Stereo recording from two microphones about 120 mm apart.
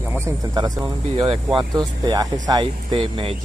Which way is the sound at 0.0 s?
20° right (ahead or behind).